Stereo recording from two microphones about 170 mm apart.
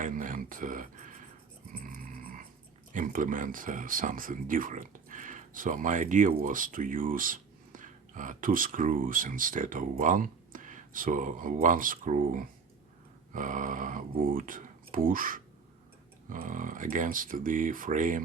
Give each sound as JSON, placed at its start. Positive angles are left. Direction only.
{"t": 0.0, "sound": "speech", "side_deg": -50}
{"t": 1.7, "sound": "music", "side_deg": -50}
{"t": 2.9, "sound": "speech", "side_deg": -50}